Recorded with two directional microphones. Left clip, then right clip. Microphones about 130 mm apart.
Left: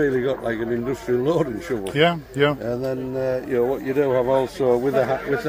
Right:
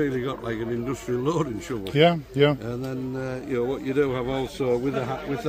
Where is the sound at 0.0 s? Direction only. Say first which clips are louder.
Left 6 dB; 70° right (ahead or behind).